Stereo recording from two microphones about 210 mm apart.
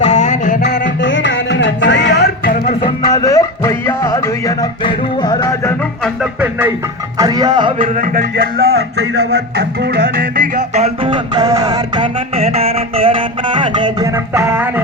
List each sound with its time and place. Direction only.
0.0 s music: 35° left (ahead or behind)
2.8 s music: 20° left (ahead or behind)
7.2 s music: 20° right (ahead or behind)
7.8 s speech: 40° right (ahead or behind)
9.0 s music: 55° right (ahead or behind); by 14.1 s 20° right (ahead or behind)
14.4 s music: 10° right (ahead or behind)